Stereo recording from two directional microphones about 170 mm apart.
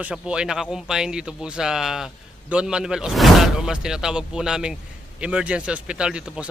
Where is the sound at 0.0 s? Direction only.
5° right (ahead or behind).